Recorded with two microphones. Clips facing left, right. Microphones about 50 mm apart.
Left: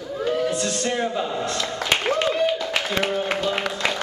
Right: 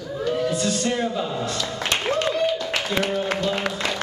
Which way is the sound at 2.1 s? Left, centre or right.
Centre.